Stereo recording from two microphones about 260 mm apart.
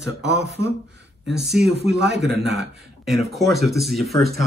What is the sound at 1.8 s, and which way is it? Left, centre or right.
Speech, right.